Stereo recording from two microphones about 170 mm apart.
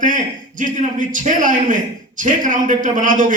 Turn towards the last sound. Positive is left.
turn(degrees=-50)  # may be behind; listen again after turning